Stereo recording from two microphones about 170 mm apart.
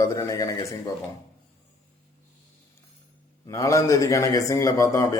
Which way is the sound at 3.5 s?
20° left (ahead or behind).